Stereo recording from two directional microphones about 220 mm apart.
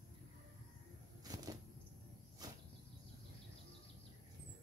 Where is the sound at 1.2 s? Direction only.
15° right (ahead or behind).